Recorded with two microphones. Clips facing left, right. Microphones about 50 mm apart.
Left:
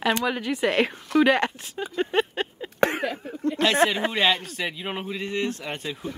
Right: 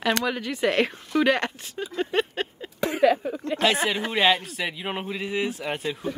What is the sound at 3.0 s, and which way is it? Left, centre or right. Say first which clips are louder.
Speech: right 10 dB; right.